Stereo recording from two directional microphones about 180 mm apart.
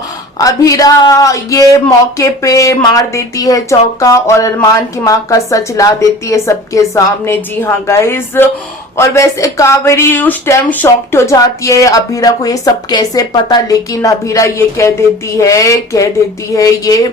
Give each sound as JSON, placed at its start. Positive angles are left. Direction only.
{"t": 0.3, "sound": "speech", "side_deg": 20}